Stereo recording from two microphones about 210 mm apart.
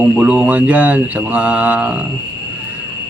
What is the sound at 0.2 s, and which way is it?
Speech, 5° right (ahead or behind).